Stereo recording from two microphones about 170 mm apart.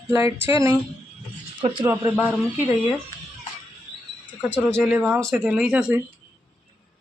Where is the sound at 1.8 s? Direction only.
10° right (ahead or behind).